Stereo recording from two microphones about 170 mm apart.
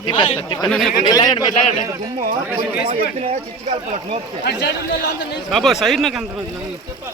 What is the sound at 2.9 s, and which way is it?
Speech, 40° right (ahead or behind).